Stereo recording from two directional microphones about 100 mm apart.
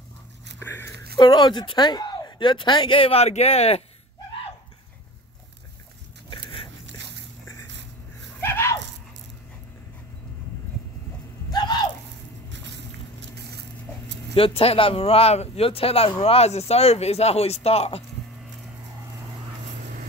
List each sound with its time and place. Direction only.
1.1 s speech: 45° left (ahead or behind); by 3.8 s 90° left
6.3 s biting: 65° left (ahead or behind)
8.4 s a sound: 25° left (ahead or behind)
14.3 s speech: 70° left (ahead or behind); by 18.0 s 90° left